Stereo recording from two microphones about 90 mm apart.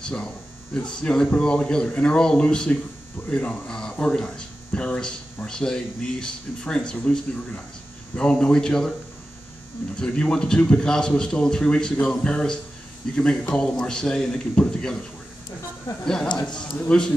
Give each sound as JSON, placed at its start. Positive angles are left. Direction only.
{"t": 0.0, "sound": "speech", "side_deg": 10}
{"t": 9.9, "sound": "speech", "side_deg": 10}
{"t": 15.9, "sound": "speech", "side_deg": 50}
{"t": 16.8, "sound": "speech", "side_deg": 10}